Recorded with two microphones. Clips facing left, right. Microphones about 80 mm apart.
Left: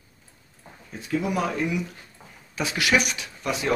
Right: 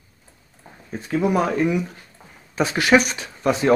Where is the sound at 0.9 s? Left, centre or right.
Right.